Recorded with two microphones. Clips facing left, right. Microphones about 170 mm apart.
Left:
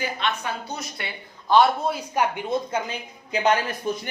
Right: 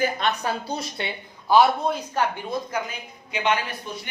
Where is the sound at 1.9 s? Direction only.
10° left (ahead or behind).